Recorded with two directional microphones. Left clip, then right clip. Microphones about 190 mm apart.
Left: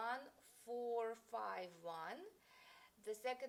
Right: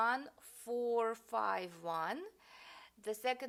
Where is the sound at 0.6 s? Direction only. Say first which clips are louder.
Right 8 dB; 50° right (ahead or behind).